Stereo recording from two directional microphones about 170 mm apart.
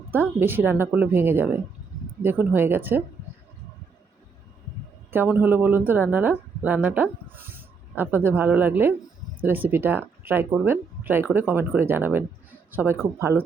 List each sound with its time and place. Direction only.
0.1 s speech: 15° right (ahead or behind)
5.1 s speech: 10° right (ahead or behind)